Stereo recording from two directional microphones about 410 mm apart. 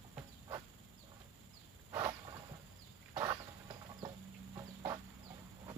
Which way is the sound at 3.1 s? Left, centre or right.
Centre.